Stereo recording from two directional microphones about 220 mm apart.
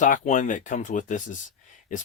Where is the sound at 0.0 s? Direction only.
35° left (ahead or behind).